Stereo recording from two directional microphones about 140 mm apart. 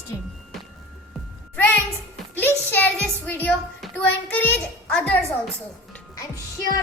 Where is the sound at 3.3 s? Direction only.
15° left (ahead or behind).